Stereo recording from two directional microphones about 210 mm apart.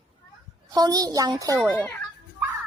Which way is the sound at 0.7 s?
20° right (ahead or behind).